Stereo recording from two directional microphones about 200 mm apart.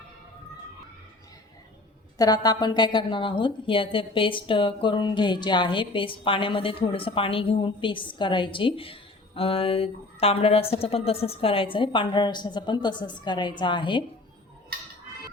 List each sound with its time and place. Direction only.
2.1 s a woman's voice: 20° left (ahead or behind)